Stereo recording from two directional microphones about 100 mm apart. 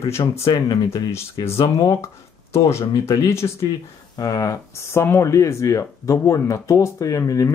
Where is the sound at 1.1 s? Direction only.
25° left (ahead or behind).